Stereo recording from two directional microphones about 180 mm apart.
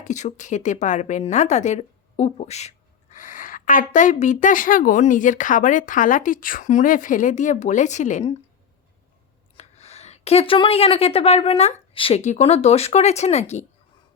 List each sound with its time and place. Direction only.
0.0 s a woman's voice: 40° left (ahead or behind)
9.6 s speech: 35° left (ahead or behind)